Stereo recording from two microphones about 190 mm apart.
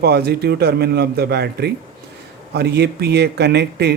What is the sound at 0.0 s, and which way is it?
Speech, 60° right (ahead or behind).